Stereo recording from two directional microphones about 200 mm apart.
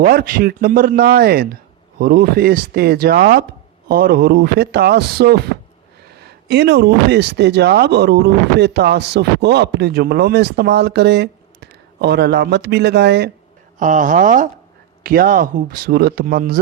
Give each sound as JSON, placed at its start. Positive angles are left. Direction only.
{"t": 0.0, "sound": "speech", "side_deg": -50}
{"t": 13.7, "sound": "speech", "side_deg": -40}